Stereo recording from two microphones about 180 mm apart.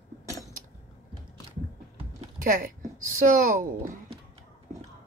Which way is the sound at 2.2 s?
50° right (ahead or behind).